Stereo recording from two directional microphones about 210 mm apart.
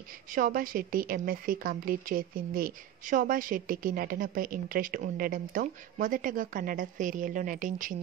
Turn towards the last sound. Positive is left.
turn(degrees=-40)  # may be behind; listen again after turning